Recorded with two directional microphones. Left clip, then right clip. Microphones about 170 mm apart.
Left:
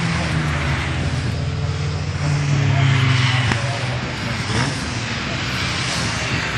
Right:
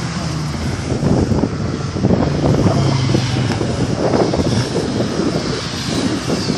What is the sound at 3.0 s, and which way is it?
Vehicle, 65° right (ahead or behind).